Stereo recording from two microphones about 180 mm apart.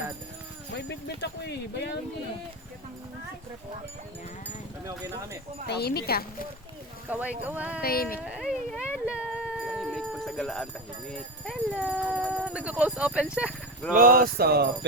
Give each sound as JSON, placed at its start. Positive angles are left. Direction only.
{"t": 0.8, "sound": "speech", "side_deg": 70}
{"t": 5.6, "sound": "speech", "side_deg": 65}
{"t": 7.1, "sound": "music", "side_deg": -10}
{"t": 7.8, "sound": "speech", "side_deg": 55}
{"t": 8.2, "sound": "a sound", "side_deg": -5}
{"t": 11.4, "sound": "speech", "side_deg": -5}
{"t": 13.9, "sound": "speech", "side_deg": -50}